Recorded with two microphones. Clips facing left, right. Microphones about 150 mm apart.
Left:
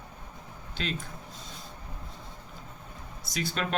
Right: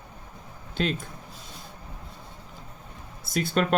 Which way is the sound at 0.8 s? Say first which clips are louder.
Right 7 dB; 45° right (ahead or behind).